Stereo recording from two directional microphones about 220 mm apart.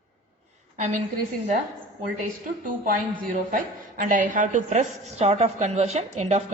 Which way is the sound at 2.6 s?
35° right (ahead or behind).